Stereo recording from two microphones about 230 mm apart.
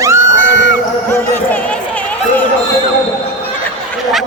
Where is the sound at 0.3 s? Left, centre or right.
Right.